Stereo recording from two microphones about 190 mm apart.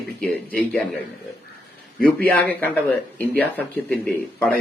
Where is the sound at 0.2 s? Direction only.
5° left (ahead or behind).